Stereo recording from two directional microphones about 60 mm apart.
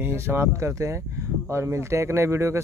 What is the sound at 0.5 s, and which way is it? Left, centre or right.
A man's voice, right.